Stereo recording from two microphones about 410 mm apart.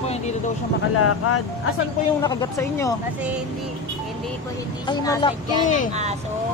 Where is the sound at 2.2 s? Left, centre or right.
Centre.